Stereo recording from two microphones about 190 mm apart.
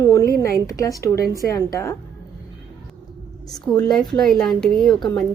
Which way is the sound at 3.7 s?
Centre (ahead or behind).